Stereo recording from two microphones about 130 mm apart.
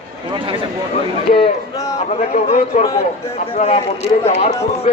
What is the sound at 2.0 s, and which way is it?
Speech, 60° left (ahead or behind).